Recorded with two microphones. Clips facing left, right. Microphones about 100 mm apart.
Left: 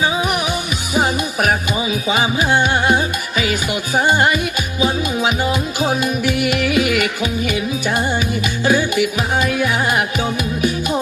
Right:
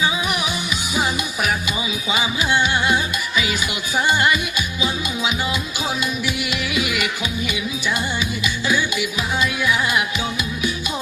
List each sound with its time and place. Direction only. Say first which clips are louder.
0.9 s music: left 6 dB; 55° left (ahead or behind)